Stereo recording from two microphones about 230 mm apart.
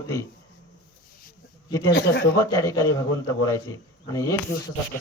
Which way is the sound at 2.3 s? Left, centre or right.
Centre.